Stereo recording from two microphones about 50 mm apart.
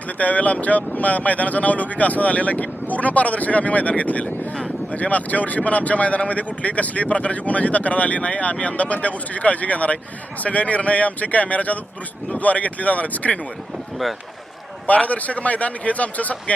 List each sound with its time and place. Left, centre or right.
0.2 s speech: left
14.8 s speech: left